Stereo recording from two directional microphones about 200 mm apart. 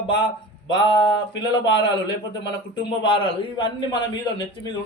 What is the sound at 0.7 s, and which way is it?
A man's voice, 20° left (ahead or behind).